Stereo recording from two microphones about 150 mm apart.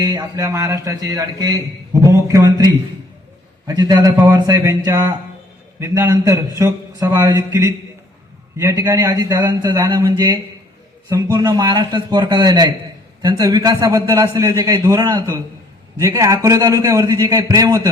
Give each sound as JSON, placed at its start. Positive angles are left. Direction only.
{"t": 0.0, "sound": "speech", "side_deg": -20}
{"t": 3.7, "sound": "speech", "side_deg": -25}